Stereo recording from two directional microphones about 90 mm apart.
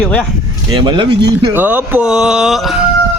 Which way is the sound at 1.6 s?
20° right (ahead or behind).